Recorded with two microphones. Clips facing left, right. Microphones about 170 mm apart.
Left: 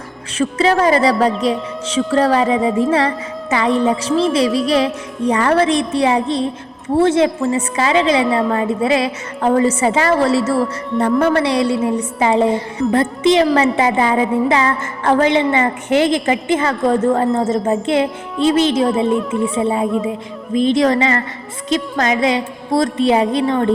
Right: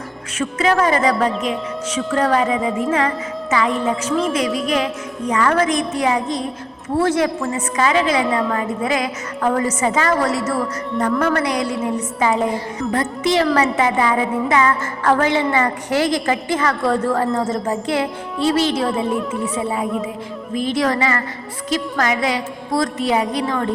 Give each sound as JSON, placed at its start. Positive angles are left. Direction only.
{"t": 0.3, "sound": "speech", "side_deg": 30}
{"t": 6.9, "sound": "music", "side_deg": 25}